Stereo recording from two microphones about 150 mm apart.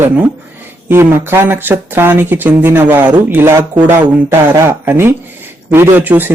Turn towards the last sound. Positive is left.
turn(degrees=-10)  # may be behind; listen again after turning